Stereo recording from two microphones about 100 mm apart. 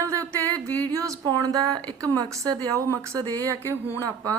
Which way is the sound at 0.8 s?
30° right (ahead or behind).